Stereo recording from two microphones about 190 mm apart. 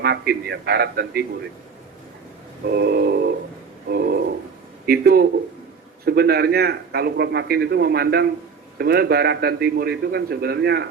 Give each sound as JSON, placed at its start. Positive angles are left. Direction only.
{"t": 0.0, "sound": "a man's voice", "side_deg": -55}
{"t": 2.6, "sound": "a sound", "side_deg": -55}
{"t": 3.8, "sound": "a man's voice", "side_deg": -55}